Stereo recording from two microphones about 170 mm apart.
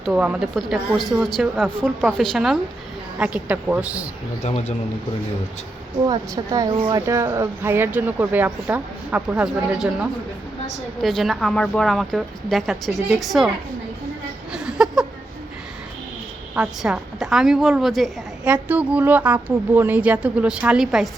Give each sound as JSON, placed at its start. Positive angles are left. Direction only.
{"t": 0.0, "sound": "a woman's voice", "side_deg": -5}
{"t": 4.4, "sound": "a man's voice", "side_deg": 40}
{"t": 6.1, "sound": "a woman's voice", "side_deg": -20}
{"t": 14.5, "sound": "a sound", "side_deg": -5}
{"t": 16.6, "sound": "a woman's voice", "side_deg": -5}